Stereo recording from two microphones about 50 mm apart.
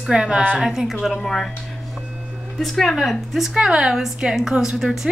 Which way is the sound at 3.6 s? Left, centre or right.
Centre.